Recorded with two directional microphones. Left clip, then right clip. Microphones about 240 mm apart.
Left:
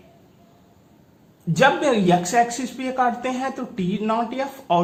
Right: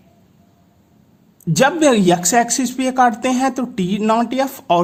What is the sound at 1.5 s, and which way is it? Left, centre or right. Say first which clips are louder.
A man's voice: right 4 dB; right.